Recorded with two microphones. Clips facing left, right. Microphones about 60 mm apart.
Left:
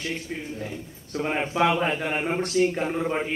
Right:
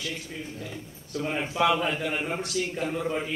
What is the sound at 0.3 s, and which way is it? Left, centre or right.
A man's voice, left.